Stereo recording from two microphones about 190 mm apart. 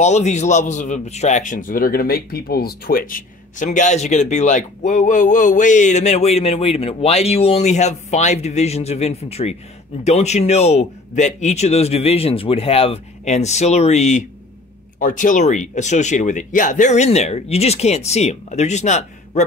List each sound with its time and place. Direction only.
0.0 s a man's voice: 35° left (ahead or behind)